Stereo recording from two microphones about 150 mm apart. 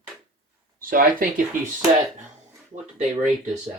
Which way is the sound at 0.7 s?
70° right (ahead or behind).